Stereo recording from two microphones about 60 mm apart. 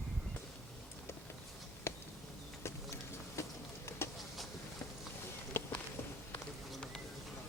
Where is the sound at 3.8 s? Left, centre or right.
Left.